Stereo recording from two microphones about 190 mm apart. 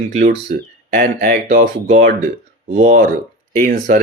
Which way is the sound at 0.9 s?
55° right (ahead or behind).